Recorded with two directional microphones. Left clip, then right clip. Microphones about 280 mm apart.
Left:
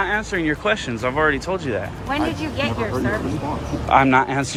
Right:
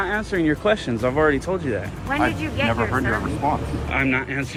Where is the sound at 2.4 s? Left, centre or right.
Left.